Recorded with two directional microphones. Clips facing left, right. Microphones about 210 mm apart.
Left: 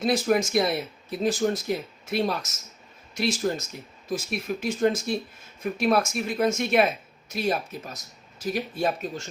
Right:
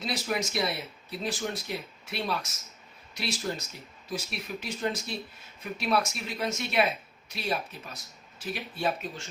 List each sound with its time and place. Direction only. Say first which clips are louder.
0.0 s speech: left 9 dB; 50° left (ahead or behind)